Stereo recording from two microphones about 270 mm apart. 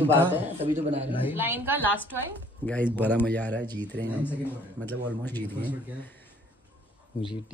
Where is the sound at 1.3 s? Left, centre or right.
Centre.